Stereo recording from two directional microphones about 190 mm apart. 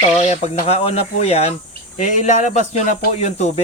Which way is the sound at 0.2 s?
35° left (ahead or behind).